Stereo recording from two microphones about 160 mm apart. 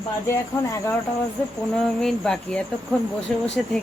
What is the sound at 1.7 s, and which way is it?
Speech, centre (ahead or behind).